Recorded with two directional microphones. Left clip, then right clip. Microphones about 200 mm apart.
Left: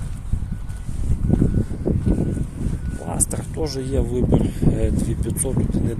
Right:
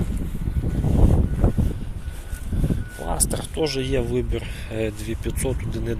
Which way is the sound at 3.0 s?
5° left (ahead or behind).